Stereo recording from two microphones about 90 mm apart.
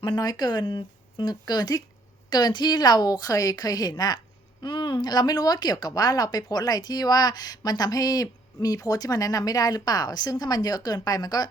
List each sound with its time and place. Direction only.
0.0 s speech: 55° left (ahead or behind)
4.6 s speech: 60° left (ahead or behind)